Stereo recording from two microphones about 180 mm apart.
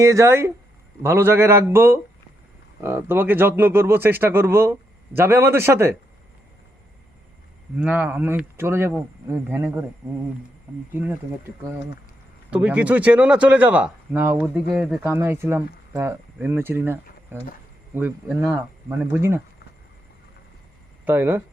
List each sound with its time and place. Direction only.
0.0 s speech: 15° right (ahead or behind)
7.8 s speech: 10° right (ahead or behind)
12.5 s speech: 5° right (ahead or behind)
21.0 s speech: 10° right (ahead or behind)